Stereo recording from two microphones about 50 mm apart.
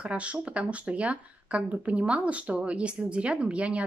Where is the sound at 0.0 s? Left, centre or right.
Right.